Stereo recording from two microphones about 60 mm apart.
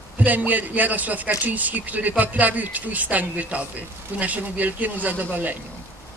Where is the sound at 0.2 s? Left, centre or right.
Right.